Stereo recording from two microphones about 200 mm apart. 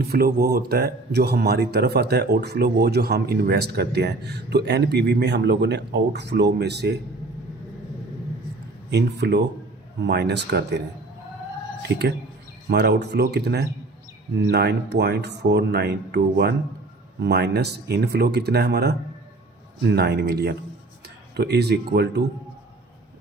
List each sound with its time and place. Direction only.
0.0 s speech: 50° right (ahead or behind)
8.9 s speech: 55° right (ahead or behind)
11.8 s speech: 55° right (ahead or behind)
20.0 s speech: 55° right (ahead or behind)